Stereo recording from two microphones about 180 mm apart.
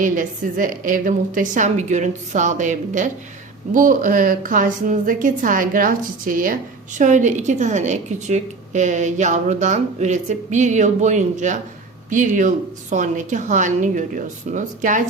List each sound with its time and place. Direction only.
0.0 s a woman's voice: 45° right (ahead or behind)